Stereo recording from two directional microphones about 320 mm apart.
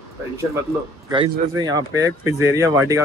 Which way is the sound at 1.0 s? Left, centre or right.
Centre.